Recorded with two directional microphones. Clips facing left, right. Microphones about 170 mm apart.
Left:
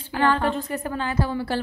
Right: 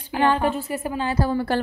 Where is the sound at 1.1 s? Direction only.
45° right (ahead or behind).